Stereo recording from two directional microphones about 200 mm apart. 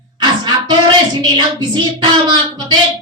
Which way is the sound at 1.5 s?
20° right (ahead or behind).